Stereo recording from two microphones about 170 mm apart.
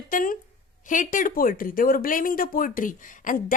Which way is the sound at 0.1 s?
55° left (ahead or behind).